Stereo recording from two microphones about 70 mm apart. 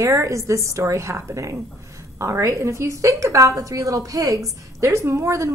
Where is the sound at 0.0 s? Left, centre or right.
Right.